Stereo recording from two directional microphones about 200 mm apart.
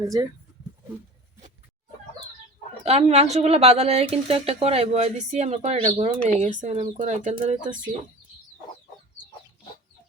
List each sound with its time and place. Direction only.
2.8 s speech: 30° right (ahead or behind)